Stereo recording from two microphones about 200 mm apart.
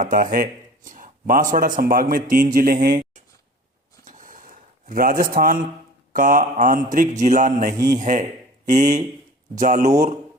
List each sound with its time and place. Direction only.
0.0 s a man's voice: 40° right (ahead or behind)
4.0 s a sound: 40° right (ahead or behind)
6.1 s a man's voice: 45° right (ahead or behind)